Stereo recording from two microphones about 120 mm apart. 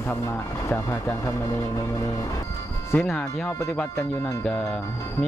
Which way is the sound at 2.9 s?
5° left (ahead or behind).